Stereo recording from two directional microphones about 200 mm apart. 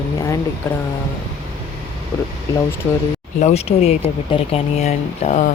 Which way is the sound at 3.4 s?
35° left (ahead or behind).